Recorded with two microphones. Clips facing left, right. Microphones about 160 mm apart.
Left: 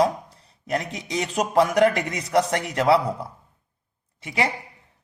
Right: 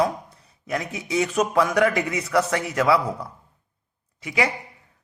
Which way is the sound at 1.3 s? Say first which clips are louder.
Left 3 dB; 35° left (ahead or behind).